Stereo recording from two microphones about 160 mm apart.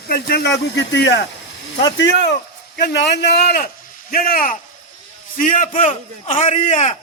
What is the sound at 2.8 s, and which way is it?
A man's voice, 90° left.